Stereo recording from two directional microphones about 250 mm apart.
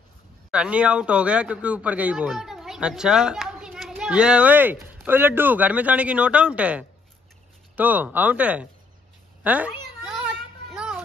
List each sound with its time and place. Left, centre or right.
0.5 s speech: centre